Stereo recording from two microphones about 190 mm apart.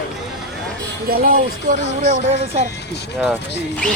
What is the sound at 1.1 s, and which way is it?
Speech, 45° right (ahead or behind).